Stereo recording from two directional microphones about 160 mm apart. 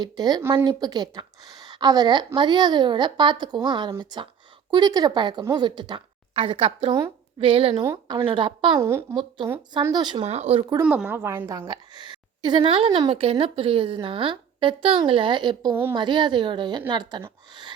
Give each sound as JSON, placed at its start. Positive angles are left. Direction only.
{"t": 0.0, "sound": "a woman's voice", "side_deg": -25}
{"t": 7.8, "sound": "a woman's voice", "side_deg": -25}
{"t": 8.8, "sound": "a woman's voice", "side_deg": -15}
{"t": 9.9, "sound": "a woman's voice", "side_deg": -25}
{"t": 10.2, "sound": "speech", "side_deg": -40}
{"t": 10.8, "sound": "a woman's voice", "side_deg": -10}
{"t": 15.7, "sound": "a woman's voice", "side_deg": -15}
{"t": 16.0, "sound": "a woman's voice", "side_deg": -30}